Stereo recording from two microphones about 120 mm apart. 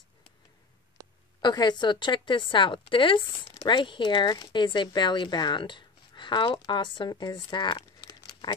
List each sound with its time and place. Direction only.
1.4 s speech: 35° left (ahead or behind)